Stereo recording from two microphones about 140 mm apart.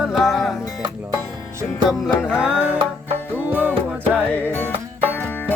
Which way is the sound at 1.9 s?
5° right (ahead or behind).